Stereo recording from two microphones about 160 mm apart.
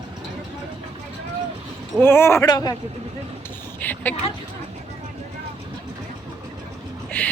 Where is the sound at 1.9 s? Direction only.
15° left (ahead or behind).